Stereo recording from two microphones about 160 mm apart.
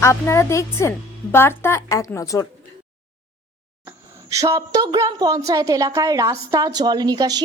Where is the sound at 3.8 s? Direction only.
20° right (ahead or behind).